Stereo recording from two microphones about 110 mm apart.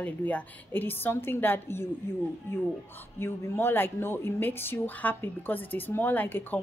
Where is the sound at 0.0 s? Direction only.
10° left (ahead or behind).